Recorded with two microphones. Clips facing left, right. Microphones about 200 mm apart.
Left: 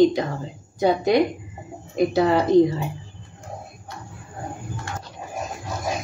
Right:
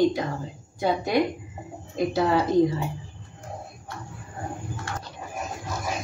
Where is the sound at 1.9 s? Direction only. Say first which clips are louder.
Left 4 dB; 15° left (ahead or behind).